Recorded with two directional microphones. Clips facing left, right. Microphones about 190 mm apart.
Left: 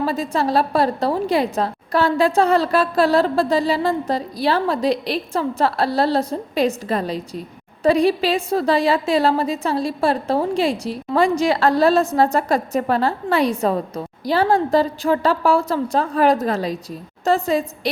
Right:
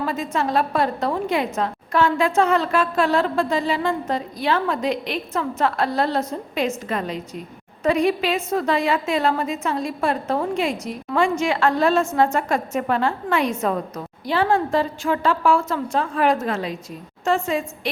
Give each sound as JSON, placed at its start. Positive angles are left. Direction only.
{"t": 0.0, "sound": "a woman's voice", "side_deg": 35}